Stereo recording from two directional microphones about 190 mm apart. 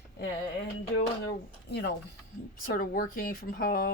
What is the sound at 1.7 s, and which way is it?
Speech, 60° left (ahead or behind).